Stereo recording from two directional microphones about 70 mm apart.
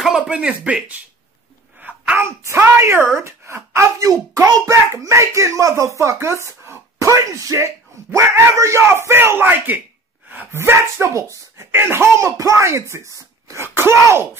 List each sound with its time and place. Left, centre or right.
0.0 s speech: centre
1.8 s sneeze: centre
2.1 s speech: right
4.0 s speech: right
10.6 s speech: right
11.7 s speech: right